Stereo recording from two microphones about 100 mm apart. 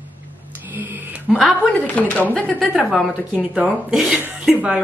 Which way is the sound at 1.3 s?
10° left (ahead or behind).